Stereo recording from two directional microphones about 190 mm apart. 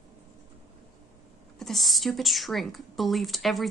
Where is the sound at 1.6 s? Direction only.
Centre (ahead or behind).